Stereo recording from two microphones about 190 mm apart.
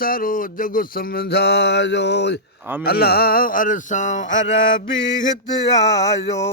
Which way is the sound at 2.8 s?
55° left (ahead or behind).